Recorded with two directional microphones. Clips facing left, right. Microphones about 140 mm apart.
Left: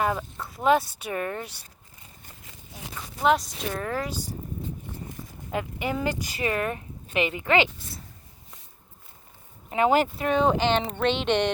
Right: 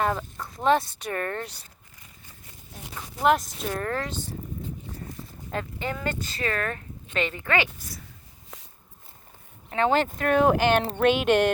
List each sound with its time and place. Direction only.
0.0 s speech: 5° left (ahead or behind)
3.2 s speech: centre (ahead or behind)
5.5 s speech: 10° left (ahead or behind)
8.5 s walk: 90° right
9.6 s speech: 10° left (ahead or behind)
10.2 s speech: 5° right (ahead or behind)